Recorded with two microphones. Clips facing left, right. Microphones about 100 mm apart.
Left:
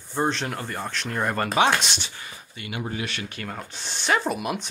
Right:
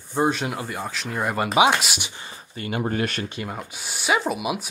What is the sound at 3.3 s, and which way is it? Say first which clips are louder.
Speech: right 3 dB; 15° right (ahead or behind).